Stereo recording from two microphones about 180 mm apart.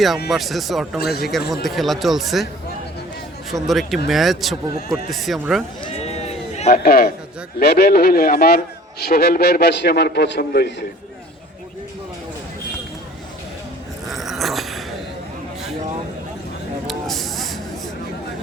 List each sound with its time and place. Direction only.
0.3 s speech: centre (ahead or behind)
0.9 s a man's voice: 60° left (ahead or behind)
1.2 s speech: centre (ahead or behind)
3.5 s speech: centre (ahead or behind)
6.0 s run: 35° left (ahead or behind)
6.7 s a man's voice: 60° left (ahead or behind)
14.1 s a sound: centre (ahead or behind)
16.8 s spray: centre (ahead or behind)